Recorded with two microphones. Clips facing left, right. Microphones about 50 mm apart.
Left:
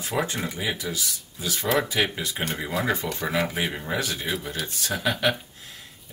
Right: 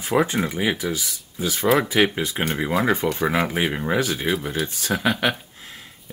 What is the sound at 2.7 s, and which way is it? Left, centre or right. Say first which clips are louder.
Speech: right 6 dB; centre.